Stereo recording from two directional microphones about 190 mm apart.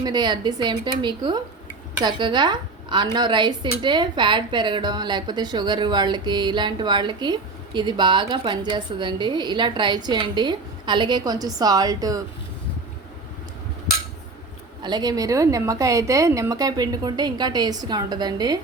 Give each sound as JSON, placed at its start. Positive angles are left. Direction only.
{"t": 0.0, "sound": "a woman's voice", "side_deg": -20}
{"t": 14.8, "sound": "a woman's voice", "side_deg": -20}